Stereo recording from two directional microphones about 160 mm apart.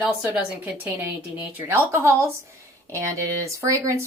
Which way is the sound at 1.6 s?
15° right (ahead or behind).